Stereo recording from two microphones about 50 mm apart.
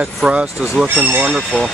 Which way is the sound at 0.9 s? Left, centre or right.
Right.